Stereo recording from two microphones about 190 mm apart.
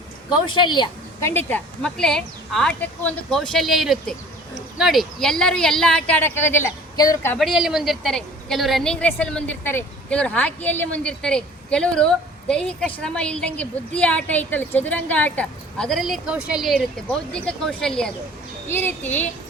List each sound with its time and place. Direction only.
0.4 s a woman's voice: 25° left (ahead or behind)
1.3 s a woman's voice: 10° left (ahead or behind)
7.3 s a woman's voice: centre (ahead or behind)